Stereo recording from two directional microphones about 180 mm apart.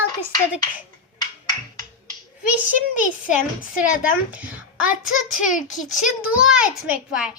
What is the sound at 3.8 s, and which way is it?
Speech, 50° left (ahead or behind).